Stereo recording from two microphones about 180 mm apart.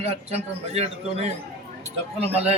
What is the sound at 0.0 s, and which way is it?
A man's voice, 35° right (ahead or behind).